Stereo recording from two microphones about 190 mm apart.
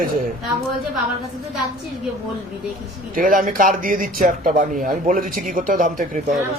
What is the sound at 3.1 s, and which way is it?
Speech, 45° right (ahead or behind).